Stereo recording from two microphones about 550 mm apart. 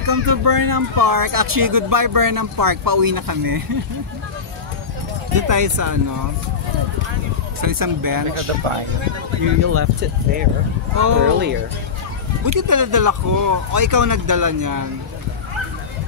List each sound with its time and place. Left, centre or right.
0.0 s speech: right
5.3 s speech: right
7.6 s speech: right
9.6 s speech: right
11.0 s speech: right
11.3 s speech: centre
12.5 s speech: right